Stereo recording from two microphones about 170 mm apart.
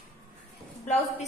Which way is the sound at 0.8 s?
40° left (ahead or behind).